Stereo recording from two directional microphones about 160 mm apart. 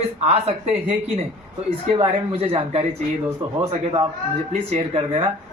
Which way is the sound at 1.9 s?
40° right (ahead or behind).